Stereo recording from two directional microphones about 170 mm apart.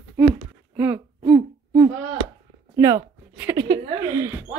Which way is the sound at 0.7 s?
10° right (ahead or behind).